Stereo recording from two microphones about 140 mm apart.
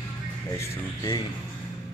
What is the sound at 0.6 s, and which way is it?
Speech, 20° left (ahead or behind).